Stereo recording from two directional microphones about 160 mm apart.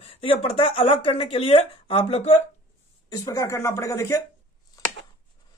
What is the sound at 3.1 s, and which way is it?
Speech, 20° left (ahead or behind).